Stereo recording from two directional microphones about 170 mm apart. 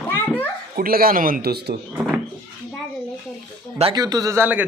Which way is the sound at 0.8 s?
60° right (ahead or behind).